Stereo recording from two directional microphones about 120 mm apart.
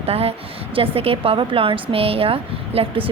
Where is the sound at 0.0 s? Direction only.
55° right (ahead or behind).